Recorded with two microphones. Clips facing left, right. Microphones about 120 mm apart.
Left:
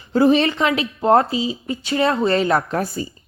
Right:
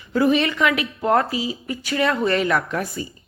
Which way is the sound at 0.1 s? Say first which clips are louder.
Left 3 dB; 30° left (ahead or behind).